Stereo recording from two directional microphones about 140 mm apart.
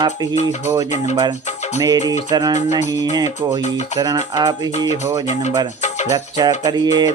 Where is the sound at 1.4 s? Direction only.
55° left (ahead or behind).